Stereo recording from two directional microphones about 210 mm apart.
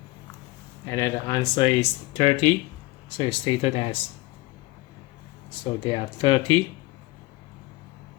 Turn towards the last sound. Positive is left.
turn(degrees=25)  # may be behind; listen again after turning